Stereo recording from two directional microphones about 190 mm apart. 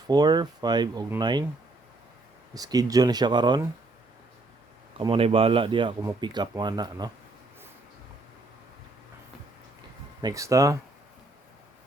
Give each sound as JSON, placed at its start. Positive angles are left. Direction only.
{"t": 0.1, "sound": "speech", "side_deg": -20}
{"t": 2.6, "sound": "speech", "side_deg": -20}
{"t": 4.9, "sound": "speech", "side_deg": -30}
{"t": 10.2, "sound": "speech", "side_deg": -20}